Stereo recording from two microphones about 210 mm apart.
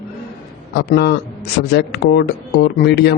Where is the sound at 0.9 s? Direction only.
50° left (ahead or behind).